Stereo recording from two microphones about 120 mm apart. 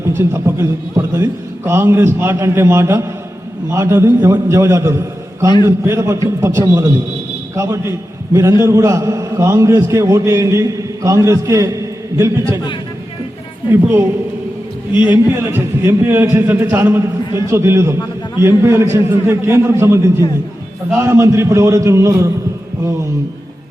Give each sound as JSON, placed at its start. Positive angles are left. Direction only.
{"t": 0.0, "sound": "a man's voice", "side_deg": -20}
{"t": 13.7, "sound": "a man's voice", "side_deg": -15}
{"t": 15.0, "sound": "a man's voice", "side_deg": -15}